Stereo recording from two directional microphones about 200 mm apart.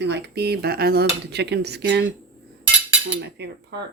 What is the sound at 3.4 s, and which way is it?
Speech, 55° right (ahead or behind).